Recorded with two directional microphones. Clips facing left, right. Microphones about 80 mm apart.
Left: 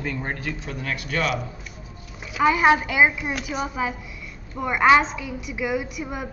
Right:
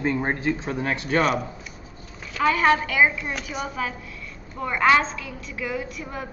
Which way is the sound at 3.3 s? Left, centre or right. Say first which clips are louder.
Left 3 dB; centre.